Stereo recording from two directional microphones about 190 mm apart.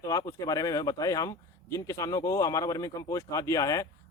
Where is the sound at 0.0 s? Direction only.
15° left (ahead or behind).